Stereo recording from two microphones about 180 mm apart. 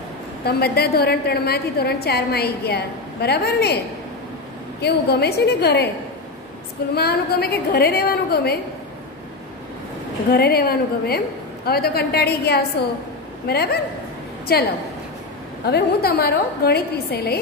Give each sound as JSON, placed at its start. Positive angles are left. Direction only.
{"t": 0.5, "sound": "a woman's voice", "side_deg": 60}
{"t": 4.8, "sound": "a woman's voice", "side_deg": 65}
{"t": 7.0, "sound": "a woman's voice", "side_deg": 60}
{"t": 10.3, "sound": "a woman's voice", "side_deg": 60}
{"t": 15.6, "sound": "a woman's voice", "side_deg": 60}